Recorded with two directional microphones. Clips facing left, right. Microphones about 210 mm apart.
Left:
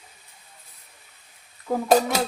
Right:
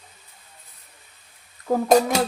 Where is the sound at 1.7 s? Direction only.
45° right (ahead or behind).